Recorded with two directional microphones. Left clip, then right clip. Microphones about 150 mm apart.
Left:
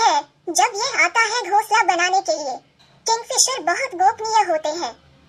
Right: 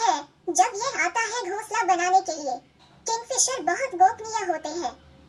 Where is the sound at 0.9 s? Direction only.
25° left (ahead or behind).